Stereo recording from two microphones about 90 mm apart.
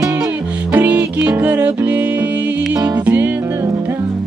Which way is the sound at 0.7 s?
20° right (ahead or behind).